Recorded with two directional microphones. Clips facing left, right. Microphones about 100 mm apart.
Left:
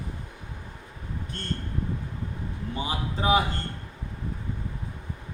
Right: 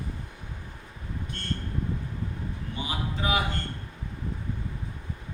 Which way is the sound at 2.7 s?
35° left (ahead or behind).